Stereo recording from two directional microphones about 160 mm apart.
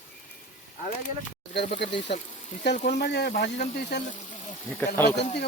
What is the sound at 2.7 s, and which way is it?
Speech, 50° left (ahead or behind).